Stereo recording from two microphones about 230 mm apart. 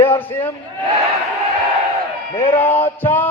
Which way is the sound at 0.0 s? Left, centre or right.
Centre.